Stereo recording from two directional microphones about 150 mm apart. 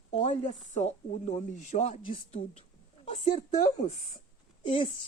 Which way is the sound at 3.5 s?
50° left (ahead or behind).